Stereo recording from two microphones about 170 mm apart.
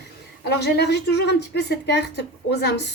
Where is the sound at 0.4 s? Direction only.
75° left (ahead or behind).